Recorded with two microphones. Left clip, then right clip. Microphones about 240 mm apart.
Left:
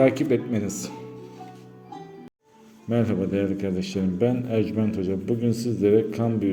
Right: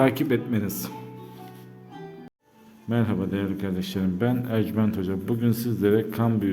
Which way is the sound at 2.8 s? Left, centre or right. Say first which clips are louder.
Left 3 dB; centre.